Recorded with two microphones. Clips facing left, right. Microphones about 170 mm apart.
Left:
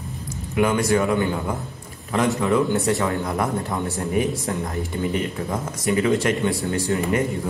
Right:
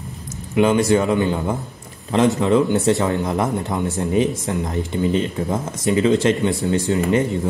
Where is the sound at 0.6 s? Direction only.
25° right (ahead or behind).